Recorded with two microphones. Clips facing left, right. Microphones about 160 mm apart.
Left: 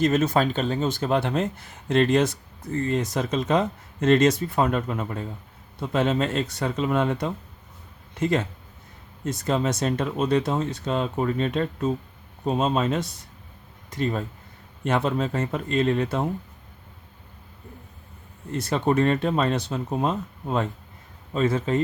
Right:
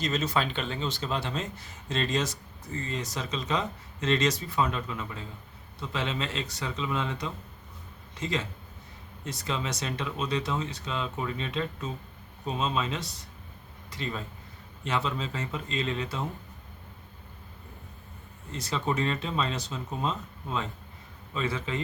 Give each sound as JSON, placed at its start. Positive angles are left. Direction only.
{"t": 0.0, "sound": "speech", "side_deg": 55}
{"t": 18.5, "sound": "speech", "side_deg": 55}